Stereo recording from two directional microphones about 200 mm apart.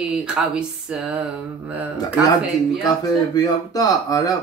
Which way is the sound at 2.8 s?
20° left (ahead or behind).